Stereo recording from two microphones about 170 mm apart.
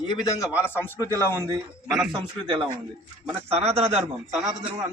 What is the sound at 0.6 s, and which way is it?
Speech, 15° left (ahead or behind).